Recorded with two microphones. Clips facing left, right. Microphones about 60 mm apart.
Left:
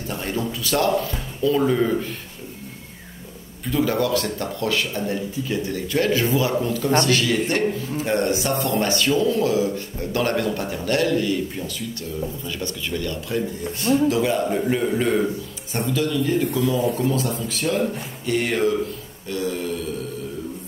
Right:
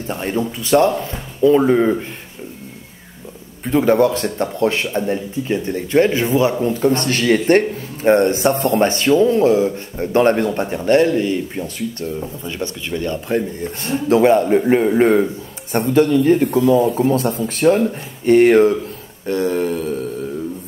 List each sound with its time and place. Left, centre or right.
0.0 s speech: right
3.6 s a man's voice: right
7.1 s a man's voice: right
13.8 s a man's voice: right
16.4 s a man's voice: right